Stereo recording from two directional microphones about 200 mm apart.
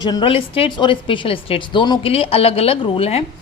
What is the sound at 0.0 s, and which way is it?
A woman's voice, 20° left (ahead or behind).